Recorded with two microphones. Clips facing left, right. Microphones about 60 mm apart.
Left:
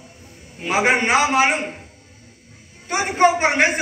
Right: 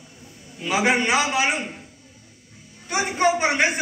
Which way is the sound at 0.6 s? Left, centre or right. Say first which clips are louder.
Left 2 dB; left.